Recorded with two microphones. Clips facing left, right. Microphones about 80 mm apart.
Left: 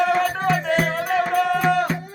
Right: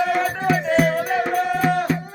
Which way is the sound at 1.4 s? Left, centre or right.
Left.